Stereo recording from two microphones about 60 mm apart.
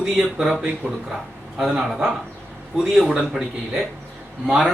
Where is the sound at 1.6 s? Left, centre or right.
Centre.